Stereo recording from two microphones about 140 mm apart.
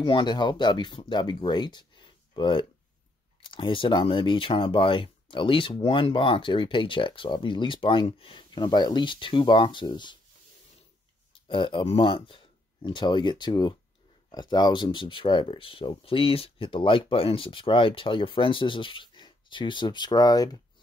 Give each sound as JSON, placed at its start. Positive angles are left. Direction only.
{"t": 0.0, "sound": "speech", "side_deg": 35}
{"t": 11.3, "sound": "speech", "side_deg": 40}